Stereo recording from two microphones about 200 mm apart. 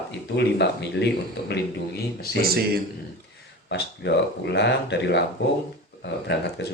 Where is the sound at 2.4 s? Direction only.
50° right (ahead or behind).